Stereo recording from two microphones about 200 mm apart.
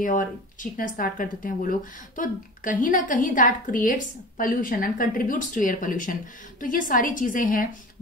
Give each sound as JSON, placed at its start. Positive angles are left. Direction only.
{"t": 0.0, "sound": "speech", "side_deg": 40}